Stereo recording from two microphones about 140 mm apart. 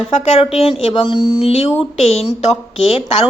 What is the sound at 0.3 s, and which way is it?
Speech, 45° left (ahead or behind).